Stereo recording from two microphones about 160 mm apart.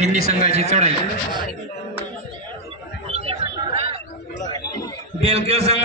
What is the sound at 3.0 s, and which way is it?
Chatter, 40° right (ahead or behind).